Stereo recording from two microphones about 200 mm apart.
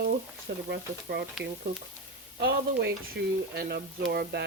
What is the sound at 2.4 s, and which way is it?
Frying, 55° right (ahead or behind).